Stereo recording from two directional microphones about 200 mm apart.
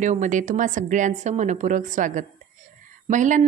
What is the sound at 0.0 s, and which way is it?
A woman's voice, 40° right (ahead or behind).